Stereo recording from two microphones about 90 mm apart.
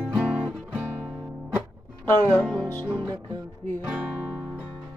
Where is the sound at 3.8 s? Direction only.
10° right (ahead or behind).